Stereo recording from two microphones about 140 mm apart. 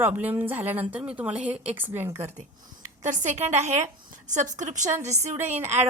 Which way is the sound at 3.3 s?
55° right (ahead or behind).